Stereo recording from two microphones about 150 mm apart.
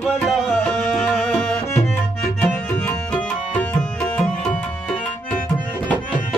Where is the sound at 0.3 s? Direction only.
Centre (ahead or behind).